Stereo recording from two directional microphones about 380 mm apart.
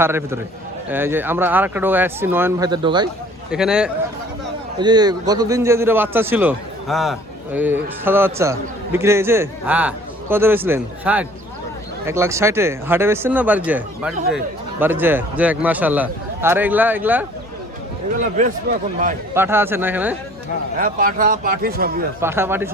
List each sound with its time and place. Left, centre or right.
0.0 s a man's voice: centre
18.2 s speech: centre
19.3 s a man's voice: centre
20.7 s speech: right
22.2 s a man's voice: centre